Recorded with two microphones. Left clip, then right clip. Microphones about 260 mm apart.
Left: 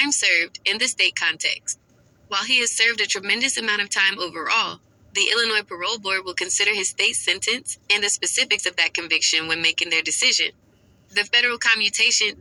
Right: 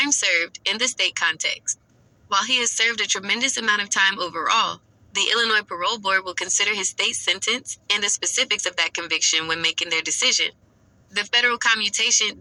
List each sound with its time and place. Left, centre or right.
0.0 s speech: centre